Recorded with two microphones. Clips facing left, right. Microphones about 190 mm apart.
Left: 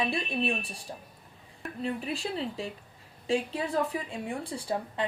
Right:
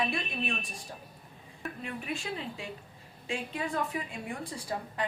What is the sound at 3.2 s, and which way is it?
A woman's voice, 35° left (ahead or behind).